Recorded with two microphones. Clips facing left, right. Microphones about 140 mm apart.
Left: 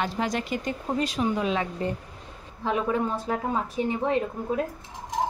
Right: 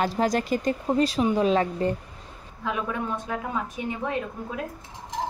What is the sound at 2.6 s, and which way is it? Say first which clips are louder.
Speech: left 4 dB; 30° left (ahead or behind).